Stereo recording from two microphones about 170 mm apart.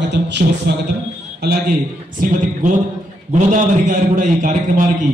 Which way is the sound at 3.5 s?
50° right (ahead or behind).